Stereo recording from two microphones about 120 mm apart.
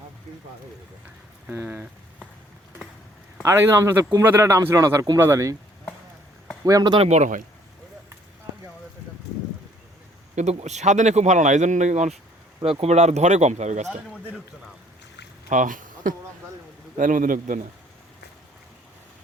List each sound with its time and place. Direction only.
1.5 s speech: 15° right (ahead or behind)
3.4 s speech: 20° right (ahead or behind)
6.7 s speech: 35° right (ahead or behind)
7.0 s speech: 70° right (ahead or behind)
10.3 s speech: 70° right (ahead or behind)
12.8 s speech: 65° right (ahead or behind)
15.4 s speech: 90° right